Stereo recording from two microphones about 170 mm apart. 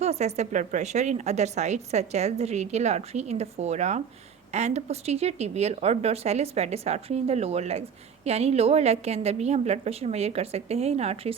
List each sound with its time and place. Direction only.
0.0 s speech: 40° right (ahead or behind)